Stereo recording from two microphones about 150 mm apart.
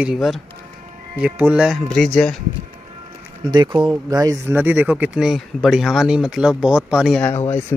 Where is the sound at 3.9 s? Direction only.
25° right (ahead or behind); by 7.1 s 5° right (ahead or behind).